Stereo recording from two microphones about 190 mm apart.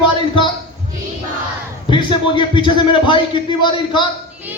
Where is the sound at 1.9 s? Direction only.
25° left (ahead or behind).